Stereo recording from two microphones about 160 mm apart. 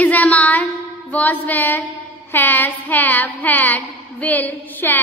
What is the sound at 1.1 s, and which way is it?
A woman's voice, 10° left (ahead or behind).